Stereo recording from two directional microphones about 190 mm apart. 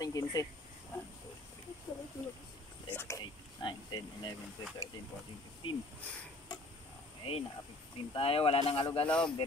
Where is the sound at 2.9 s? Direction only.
15° left (ahead or behind).